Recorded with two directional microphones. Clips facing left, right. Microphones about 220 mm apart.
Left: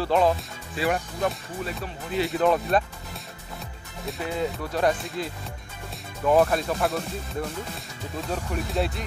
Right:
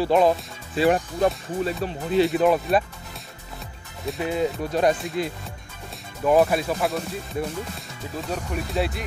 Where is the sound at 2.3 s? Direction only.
10° right (ahead or behind).